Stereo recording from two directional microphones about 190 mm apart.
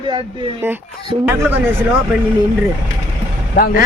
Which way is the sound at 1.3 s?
15° right (ahead or behind).